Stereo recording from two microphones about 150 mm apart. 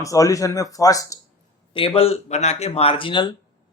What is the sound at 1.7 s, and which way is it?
Speech, 35° left (ahead or behind).